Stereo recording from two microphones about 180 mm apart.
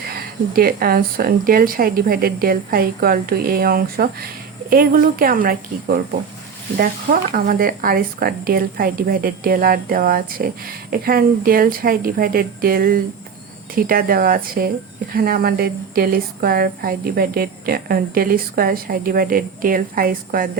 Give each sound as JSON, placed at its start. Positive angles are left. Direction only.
{"t": 0.1, "sound": "a woman's voice", "side_deg": -55}